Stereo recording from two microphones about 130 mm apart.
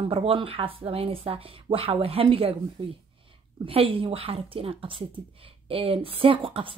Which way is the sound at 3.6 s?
45° right (ahead or behind).